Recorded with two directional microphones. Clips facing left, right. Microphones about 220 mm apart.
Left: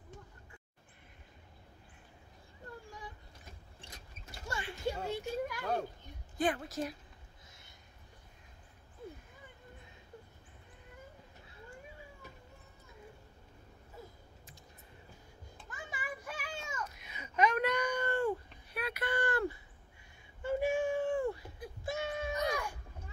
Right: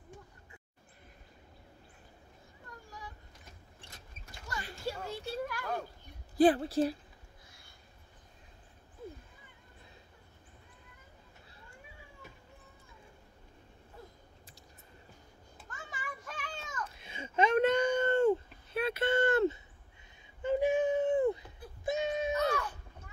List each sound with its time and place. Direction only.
4.5 s a sound: 25° left (ahead or behind)
4.8 s children playing: 20° left (ahead or behind)
6.3 s a woman's voice: 35° right (ahead or behind)
15.7 s children playing: 10° left (ahead or behind)
16.9 s a sound: 30° right (ahead or behind)
22.3 s wail: 15° left (ahead or behind)